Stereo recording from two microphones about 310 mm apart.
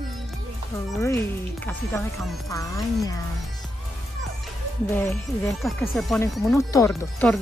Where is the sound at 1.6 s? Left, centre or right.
Centre.